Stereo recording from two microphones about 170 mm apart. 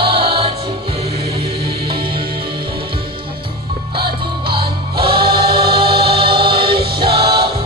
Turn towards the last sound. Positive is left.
turn(degrees=-30)  # may be behind; listen again after turning